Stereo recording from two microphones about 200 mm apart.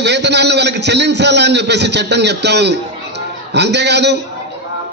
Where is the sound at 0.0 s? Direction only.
60° right (ahead or behind).